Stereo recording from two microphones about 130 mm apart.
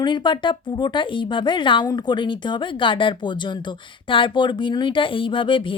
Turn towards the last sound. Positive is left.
turn(degrees=40)  # may be behind; listen again after turning